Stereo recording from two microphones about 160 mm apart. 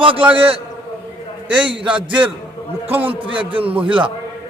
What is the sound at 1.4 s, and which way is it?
Speech, 5° right (ahead or behind).